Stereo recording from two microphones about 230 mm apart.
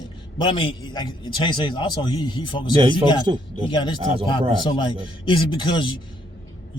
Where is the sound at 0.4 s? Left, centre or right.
Left.